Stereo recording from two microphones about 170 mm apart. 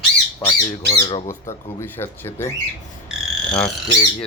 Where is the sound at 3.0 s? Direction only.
5° left (ahead or behind).